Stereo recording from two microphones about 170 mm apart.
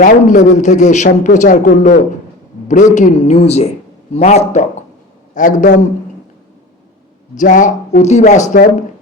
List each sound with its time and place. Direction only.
0.0 s a man's voice: 50° left (ahead or behind)
7.3 s speech: 50° left (ahead or behind)